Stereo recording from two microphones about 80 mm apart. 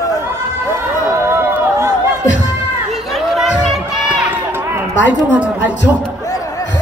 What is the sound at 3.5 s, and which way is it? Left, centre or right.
Run, centre.